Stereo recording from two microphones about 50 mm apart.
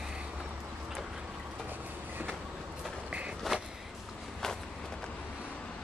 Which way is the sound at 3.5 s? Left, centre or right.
Centre.